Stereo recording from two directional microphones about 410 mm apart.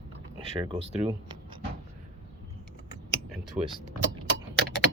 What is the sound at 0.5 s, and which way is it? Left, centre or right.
Speech, centre.